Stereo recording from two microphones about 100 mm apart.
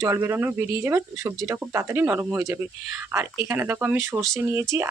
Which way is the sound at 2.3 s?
30° right (ahead or behind).